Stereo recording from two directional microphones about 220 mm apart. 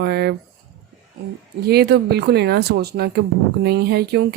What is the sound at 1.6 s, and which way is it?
A woman's voice, 45° right (ahead or behind).